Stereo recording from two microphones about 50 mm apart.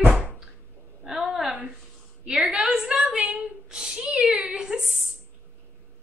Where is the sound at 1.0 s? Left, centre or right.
Centre.